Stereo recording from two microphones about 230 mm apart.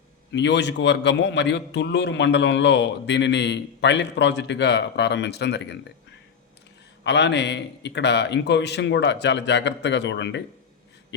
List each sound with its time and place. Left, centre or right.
0.3 s a man's voice: left
7.0 s a man's voice: left